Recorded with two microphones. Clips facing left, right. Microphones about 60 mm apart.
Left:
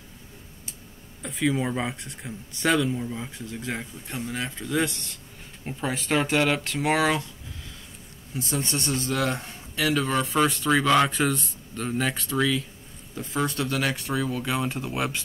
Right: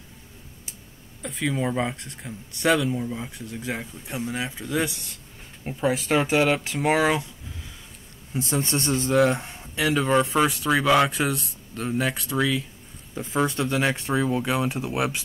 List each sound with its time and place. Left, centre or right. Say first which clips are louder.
1.2 s speech: left 1 dB; centre
8.3 s a man's voice: right 3 dB; right; by 12.6 s centre
13.1 s speech: right 3 dB; right
14.5 s a man's voice: right 3 dB; centre